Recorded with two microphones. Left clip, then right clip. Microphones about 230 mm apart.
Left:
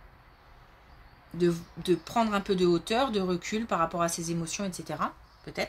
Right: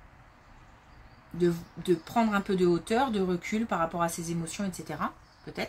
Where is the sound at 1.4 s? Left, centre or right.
Left.